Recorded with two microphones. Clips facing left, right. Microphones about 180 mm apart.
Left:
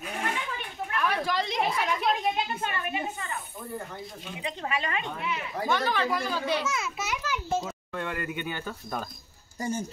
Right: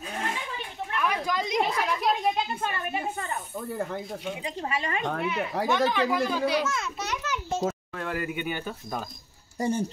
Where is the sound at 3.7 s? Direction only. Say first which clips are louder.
Right 6 dB; 60° right (ahead or behind).